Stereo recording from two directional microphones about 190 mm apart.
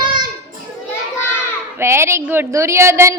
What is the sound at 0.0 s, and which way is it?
Children playing, 25° right (ahead or behind).